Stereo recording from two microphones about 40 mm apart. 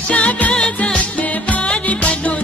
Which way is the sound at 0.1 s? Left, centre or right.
Left.